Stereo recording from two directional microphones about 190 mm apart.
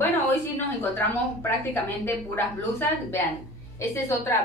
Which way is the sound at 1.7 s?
10° left (ahead or behind).